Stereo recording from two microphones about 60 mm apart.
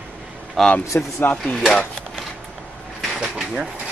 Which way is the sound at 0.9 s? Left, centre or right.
Left.